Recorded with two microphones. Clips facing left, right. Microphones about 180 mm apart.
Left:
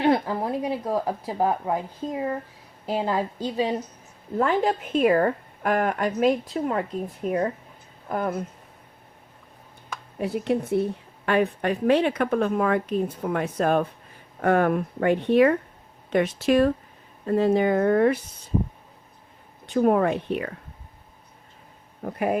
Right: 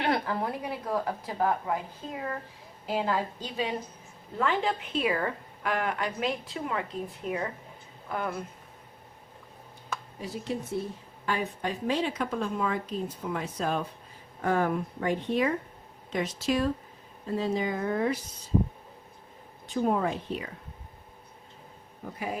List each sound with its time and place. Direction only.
0.0 s a woman's voice: 25° left (ahead or behind)
2.8 s a woman's voice: 35° left (ahead or behind)
4.4 s a woman's voice: 40° left (ahead or behind)
10.2 s speech: 60° left (ahead or behind)
19.6 s speech: 65° left (ahead or behind)
22.0 s speech: 60° left (ahead or behind)